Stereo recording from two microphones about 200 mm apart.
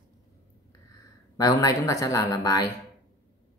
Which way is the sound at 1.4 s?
15° left (ahead or behind).